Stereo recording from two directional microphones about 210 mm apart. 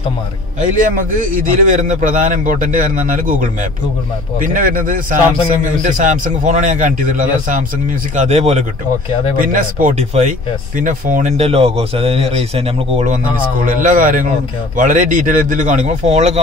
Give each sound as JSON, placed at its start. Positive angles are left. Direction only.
{"t": 0.8, "sound": "a man's voice", "side_deg": -40}